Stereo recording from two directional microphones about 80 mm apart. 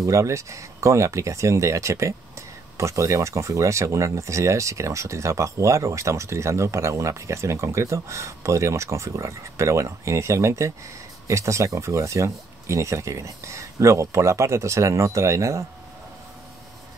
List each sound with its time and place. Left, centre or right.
0.0 s speech: right